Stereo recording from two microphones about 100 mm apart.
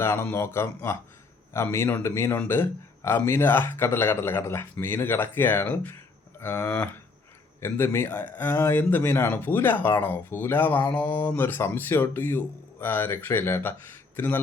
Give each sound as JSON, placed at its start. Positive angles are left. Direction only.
{"t": 0.0, "sound": "speech", "side_deg": 25}